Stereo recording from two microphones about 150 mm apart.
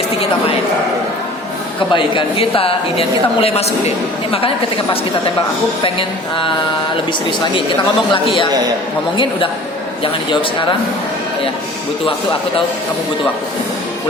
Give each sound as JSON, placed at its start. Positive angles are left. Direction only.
{"t": 1.9, "sound": "a woman's voice", "side_deg": 35}
{"t": 5.8, "sound": "a woman's voice", "side_deg": 35}
{"t": 8.1, "sound": "a woman's voice", "side_deg": 35}